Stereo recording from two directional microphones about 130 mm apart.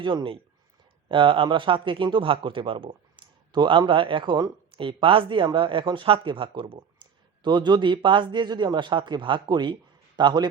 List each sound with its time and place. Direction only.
0.0 s a man's voice: 40° right (ahead or behind)